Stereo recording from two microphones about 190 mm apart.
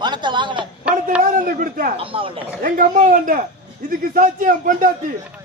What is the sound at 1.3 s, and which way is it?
Speech, 45° right (ahead or behind).